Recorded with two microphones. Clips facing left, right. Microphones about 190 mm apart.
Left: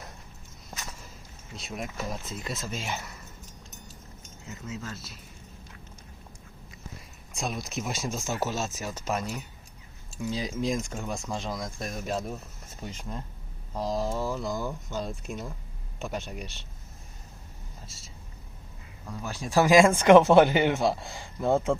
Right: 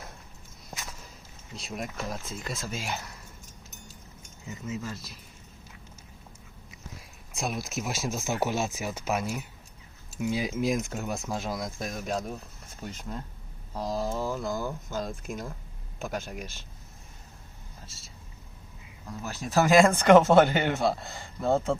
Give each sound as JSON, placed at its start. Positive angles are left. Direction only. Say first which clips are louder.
{"t": 1.5, "sound": "speech", "louder": "even", "side_deg": 0}
{"t": 4.4, "sound": "speech", "louder": "right 3 dB", "side_deg": -15}
{"t": 7.3, "sound": "speech", "louder": "right 1 dB", "side_deg": -5}
{"t": 19.3, "sound": "speech", "louder": "left 1 dB", "side_deg": 10}